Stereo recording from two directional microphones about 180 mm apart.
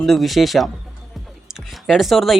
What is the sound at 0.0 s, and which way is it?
Speech, centre (ahead or behind).